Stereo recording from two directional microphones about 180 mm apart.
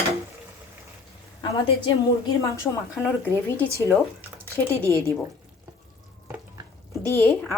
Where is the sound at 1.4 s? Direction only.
25° left (ahead or behind).